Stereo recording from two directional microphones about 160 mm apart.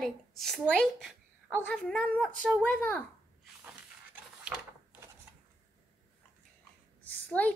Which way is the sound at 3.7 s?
5° right (ahead or behind).